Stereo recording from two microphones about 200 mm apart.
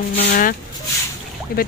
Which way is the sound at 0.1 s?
45° left (ahead or behind).